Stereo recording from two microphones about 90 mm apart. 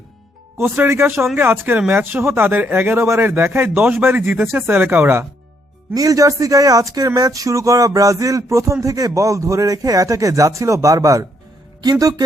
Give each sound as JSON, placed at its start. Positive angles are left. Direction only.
{"t": 0.6, "sound": "a man's voice", "side_deg": -25}
{"t": 5.9, "sound": "speech", "side_deg": -40}